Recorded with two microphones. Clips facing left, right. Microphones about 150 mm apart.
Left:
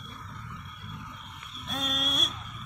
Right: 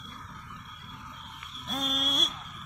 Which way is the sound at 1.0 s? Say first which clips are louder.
Left 1 dB; centre (ahead or behind).